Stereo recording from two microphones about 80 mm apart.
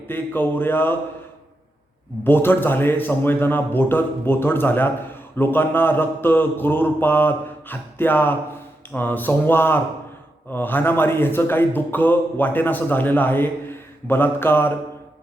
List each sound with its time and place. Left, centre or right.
0.1 s a man's voice: left
2.2 s a man's voice: left